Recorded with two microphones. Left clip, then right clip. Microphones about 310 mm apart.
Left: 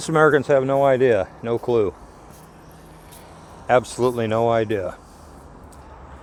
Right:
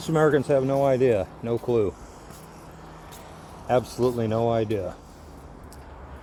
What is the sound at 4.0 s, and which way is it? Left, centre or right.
Speech, left.